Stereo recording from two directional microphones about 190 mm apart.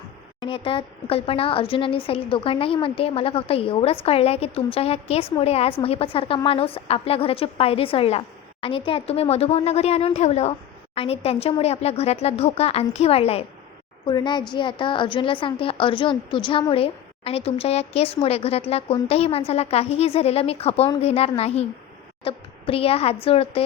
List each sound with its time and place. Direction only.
0.3 s a woman's voice: 25° left (ahead or behind)